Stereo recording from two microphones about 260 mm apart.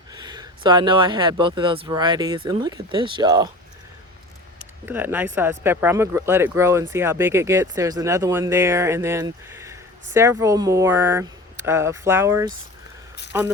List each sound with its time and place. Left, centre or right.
0.1 s speech: centre
4.9 s speech: centre